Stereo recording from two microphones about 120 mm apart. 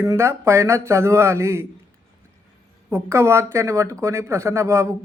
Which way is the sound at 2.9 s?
20° right (ahead or behind).